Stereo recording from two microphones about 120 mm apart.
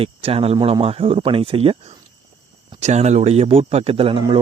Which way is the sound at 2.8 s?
65° right (ahead or behind).